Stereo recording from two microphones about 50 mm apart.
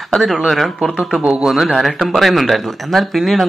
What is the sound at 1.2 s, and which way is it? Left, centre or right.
Speech, centre.